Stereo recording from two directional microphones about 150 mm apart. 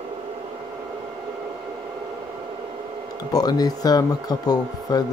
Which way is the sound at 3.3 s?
25° left (ahead or behind).